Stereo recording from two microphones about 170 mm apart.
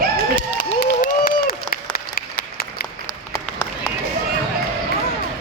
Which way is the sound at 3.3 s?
20° left (ahead or behind).